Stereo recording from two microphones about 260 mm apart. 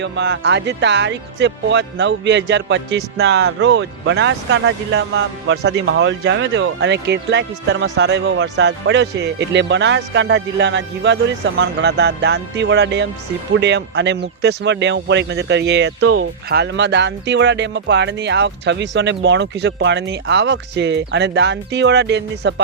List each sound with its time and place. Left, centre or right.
0.0 s speech: right
16.0 s speech: right
16.5 s speech: right